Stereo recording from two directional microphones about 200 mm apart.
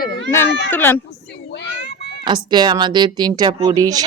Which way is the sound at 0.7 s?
10° left (ahead or behind).